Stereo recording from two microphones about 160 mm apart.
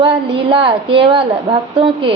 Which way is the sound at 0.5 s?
35° right (ahead or behind).